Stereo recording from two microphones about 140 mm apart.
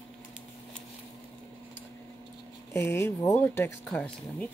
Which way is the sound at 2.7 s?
15° left (ahead or behind).